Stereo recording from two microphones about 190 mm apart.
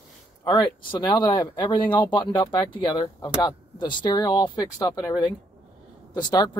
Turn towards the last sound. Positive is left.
turn(degrees=20)  # may be behind; listen again after turning